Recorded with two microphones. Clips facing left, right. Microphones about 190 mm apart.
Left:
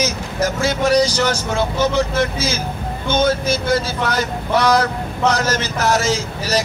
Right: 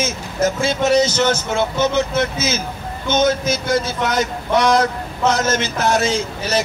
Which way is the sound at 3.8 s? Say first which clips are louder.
Right 1 dB; 20° right (ahead or behind).